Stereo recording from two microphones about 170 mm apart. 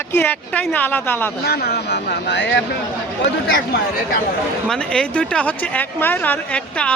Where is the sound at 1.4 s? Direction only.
70° left (ahead or behind); by 2.6 s 90° left.